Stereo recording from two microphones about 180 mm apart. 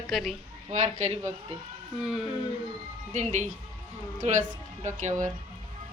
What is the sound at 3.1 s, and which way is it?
Speech, 40° right (ahead or behind).